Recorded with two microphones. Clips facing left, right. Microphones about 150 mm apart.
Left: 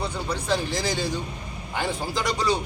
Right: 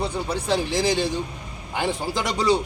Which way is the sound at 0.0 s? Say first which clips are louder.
Right 3 dB; 25° right (ahead or behind).